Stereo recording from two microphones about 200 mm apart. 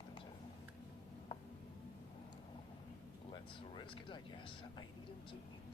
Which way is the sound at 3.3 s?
25° left (ahead or behind).